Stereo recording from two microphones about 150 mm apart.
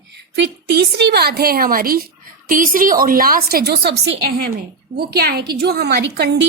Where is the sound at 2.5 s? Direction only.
65° right (ahead or behind).